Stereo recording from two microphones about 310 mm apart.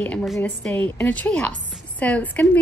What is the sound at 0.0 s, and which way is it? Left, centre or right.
A woman's voice, centre.